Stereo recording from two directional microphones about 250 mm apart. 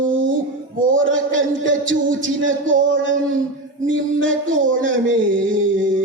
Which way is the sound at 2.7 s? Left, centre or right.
Right.